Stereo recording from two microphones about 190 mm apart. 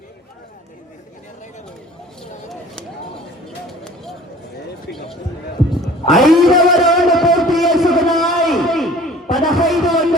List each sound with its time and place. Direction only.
4.9 s basketball bounce: 60° left (ahead or behind)
5.8 s music: centre (ahead or behind)
9.3 s a sound: centre (ahead or behind)